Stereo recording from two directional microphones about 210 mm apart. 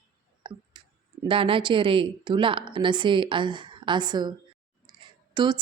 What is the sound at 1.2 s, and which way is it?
Speech, 25° right (ahead or behind).